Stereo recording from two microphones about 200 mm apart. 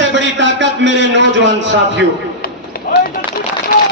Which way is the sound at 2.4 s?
50° left (ahead or behind).